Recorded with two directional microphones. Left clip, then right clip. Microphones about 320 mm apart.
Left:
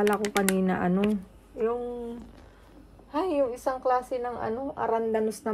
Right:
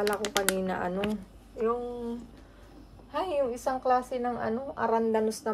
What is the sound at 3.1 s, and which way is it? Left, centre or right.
A woman's voice, centre.